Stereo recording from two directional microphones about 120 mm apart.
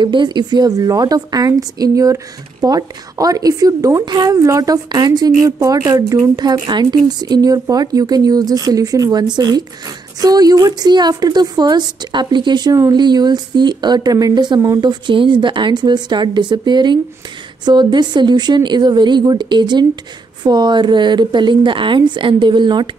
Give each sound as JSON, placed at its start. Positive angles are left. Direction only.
{"t": 0.0, "sound": "a woman's voice", "side_deg": -40}